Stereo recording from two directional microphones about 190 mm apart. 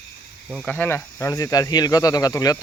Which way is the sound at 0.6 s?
10° left (ahead or behind).